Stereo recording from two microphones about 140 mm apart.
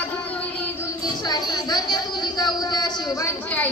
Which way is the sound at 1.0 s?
30° left (ahead or behind).